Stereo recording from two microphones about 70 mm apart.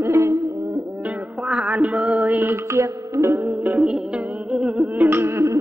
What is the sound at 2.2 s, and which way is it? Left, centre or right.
Music, right.